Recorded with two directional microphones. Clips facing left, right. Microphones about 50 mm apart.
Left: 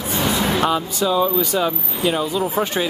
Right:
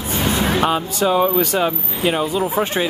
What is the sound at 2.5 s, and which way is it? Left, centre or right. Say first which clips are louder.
Speech: right 1 dB; centre.